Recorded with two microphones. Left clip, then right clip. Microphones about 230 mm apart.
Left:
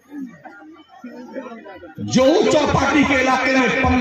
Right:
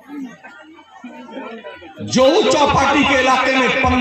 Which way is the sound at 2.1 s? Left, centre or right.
Left.